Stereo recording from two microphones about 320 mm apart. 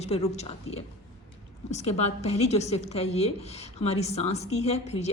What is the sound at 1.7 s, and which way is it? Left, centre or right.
A woman's voice, centre.